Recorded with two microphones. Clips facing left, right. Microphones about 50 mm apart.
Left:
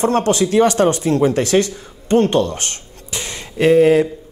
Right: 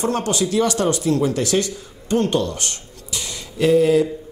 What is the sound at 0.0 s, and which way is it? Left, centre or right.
Speech, left.